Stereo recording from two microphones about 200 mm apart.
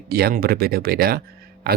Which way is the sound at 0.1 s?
50° right (ahead or behind).